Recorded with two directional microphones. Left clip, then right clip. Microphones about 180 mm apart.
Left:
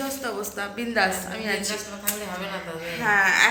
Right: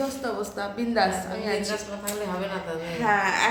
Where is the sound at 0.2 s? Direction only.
5° left (ahead or behind).